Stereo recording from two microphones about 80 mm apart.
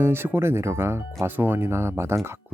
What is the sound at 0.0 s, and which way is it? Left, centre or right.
Speech, right.